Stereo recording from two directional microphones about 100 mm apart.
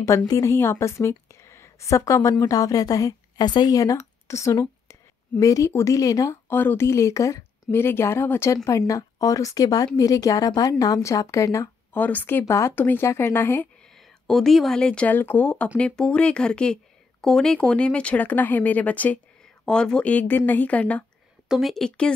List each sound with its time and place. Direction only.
0.3 s a woman's voice: 30° left (ahead or behind)
6.5 s a woman's voice: 20° left (ahead or behind)
11.9 s speech: 15° left (ahead or behind)
13.9 s speech: 5° left (ahead or behind)
21.5 s a woman's voice: centre (ahead or behind)